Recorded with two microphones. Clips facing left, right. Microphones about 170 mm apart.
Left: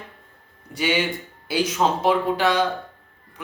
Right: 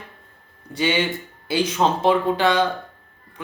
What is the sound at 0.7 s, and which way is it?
Speech, 10° left (ahead or behind).